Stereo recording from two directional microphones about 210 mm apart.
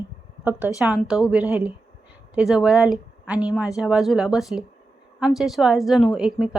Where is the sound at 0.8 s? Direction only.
5° right (ahead or behind).